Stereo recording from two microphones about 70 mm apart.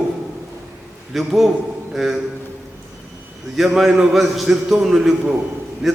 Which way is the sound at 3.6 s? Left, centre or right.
Centre.